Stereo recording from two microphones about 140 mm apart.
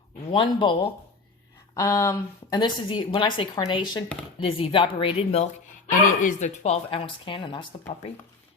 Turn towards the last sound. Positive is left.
turn(degrees=35)  # may be behind; listen again after turning